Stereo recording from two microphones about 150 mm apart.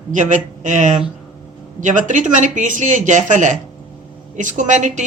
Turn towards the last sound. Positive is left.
turn(degrees=-55)  # may be behind; listen again after turning